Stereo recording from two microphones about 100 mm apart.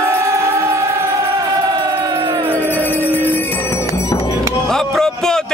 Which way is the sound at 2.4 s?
20° right (ahead or behind).